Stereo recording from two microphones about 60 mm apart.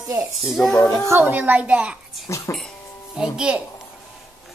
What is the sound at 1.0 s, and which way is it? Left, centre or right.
Speech, right.